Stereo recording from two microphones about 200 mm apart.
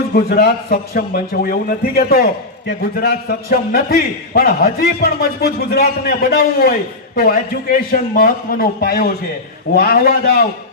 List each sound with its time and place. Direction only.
0.1 s a man's voice: 50° left (ahead or behind)